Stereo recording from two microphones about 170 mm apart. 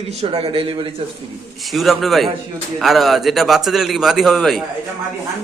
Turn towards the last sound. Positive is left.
turn(degrees=0)  # may be behind; listen again after turning